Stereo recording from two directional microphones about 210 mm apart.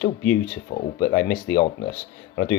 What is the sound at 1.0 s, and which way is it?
Speech, 55° left (ahead or behind).